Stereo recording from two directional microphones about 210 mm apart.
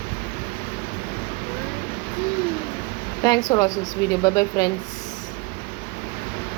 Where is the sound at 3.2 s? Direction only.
20° left (ahead or behind).